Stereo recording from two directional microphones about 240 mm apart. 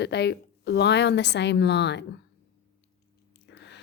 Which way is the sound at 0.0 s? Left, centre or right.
Left.